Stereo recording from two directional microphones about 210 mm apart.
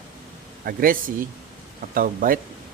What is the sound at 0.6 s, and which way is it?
Speech, 45° right (ahead or behind).